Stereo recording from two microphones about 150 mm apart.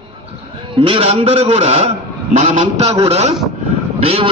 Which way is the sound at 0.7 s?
35° right (ahead or behind).